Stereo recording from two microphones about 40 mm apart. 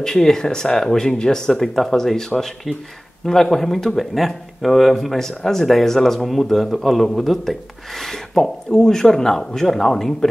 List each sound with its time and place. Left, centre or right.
0.0 s a man's voice: centre